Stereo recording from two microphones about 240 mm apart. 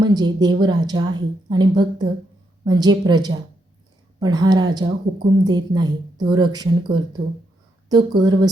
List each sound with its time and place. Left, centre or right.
0.0 s a woman's voice: centre